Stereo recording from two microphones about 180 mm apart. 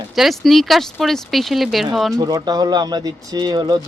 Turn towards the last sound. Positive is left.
turn(degrees=-20)  # may be behind; listen again after turning